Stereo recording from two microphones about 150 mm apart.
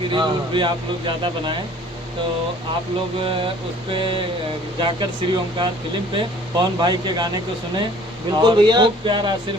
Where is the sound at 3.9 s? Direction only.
35° right (ahead or behind).